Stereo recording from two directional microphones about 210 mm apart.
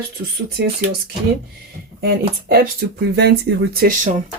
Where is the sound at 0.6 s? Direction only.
50° right (ahead or behind).